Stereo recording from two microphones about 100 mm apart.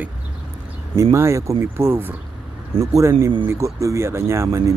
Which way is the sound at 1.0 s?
30° right (ahead or behind).